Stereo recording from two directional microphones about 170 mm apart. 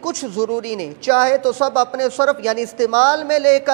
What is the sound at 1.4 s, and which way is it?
Speech, 30° right (ahead or behind).